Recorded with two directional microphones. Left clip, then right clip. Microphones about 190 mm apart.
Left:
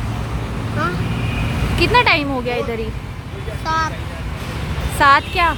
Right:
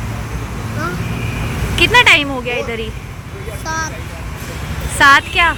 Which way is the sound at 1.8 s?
10° left (ahead or behind).